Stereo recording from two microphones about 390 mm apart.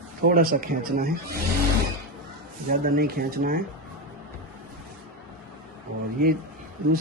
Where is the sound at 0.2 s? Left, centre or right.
Right.